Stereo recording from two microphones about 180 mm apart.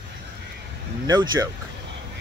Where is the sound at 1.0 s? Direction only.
20° right (ahead or behind).